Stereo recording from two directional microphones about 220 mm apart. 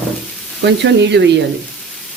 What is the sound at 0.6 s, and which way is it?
Speech, 50° right (ahead or behind).